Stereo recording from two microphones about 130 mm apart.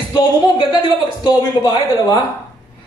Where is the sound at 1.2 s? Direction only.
35° left (ahead or behind).